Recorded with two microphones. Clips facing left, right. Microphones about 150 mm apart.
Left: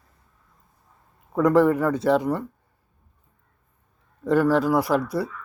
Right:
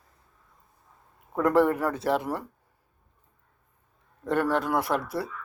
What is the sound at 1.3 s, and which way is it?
Speech, centre (ahead or behind).